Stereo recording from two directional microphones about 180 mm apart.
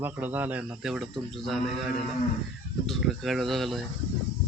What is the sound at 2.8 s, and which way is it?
Speech, centre (ahead or behind).